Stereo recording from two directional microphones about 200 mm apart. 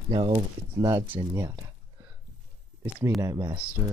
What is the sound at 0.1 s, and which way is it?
Speech, 25° right (ahead or behind).